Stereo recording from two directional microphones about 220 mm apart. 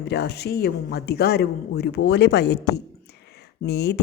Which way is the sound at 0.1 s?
50° left (ahead or behind).